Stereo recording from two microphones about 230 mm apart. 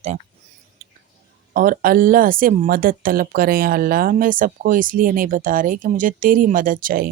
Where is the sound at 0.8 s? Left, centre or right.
Right.